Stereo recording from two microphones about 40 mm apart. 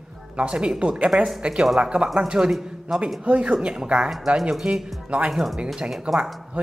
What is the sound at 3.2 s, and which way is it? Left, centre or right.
Speech, right.